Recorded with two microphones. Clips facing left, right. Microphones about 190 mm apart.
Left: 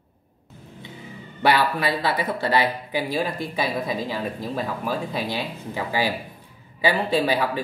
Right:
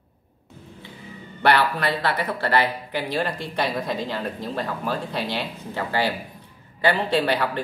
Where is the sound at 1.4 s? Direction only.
10° left (ahead or behind).